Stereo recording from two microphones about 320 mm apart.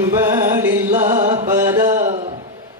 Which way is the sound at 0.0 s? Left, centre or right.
Centre.